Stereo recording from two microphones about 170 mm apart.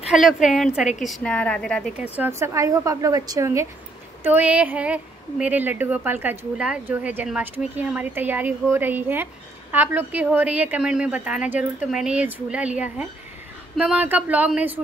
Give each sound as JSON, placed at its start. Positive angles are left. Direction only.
{"t": 0.1, "sound": "a woman's voice", "side_deg": -5}
{"t": 2.1, "sound": "a woman's voice", "side_deg": -15}